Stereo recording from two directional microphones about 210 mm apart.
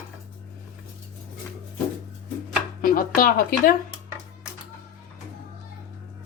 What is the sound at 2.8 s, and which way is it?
Speech, 45° left (ahead or behind).